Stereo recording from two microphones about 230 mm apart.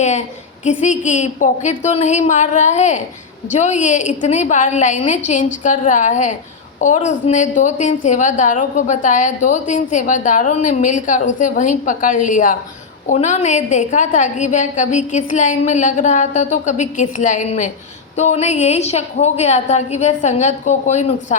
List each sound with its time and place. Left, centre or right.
0.0 s a woman's voice: left